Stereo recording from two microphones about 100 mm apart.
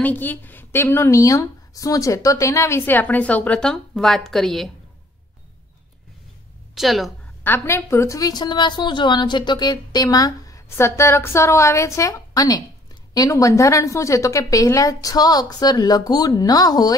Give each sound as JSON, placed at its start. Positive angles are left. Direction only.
{"t": 0.0, "sound": "a woman's voice", "side_deg": 20}
{"t": 6.7, "sound": "a woman's voice", "side_deg": 0}
{"t": 7.4, "sound": "a woman's voice", "side_deg": 25}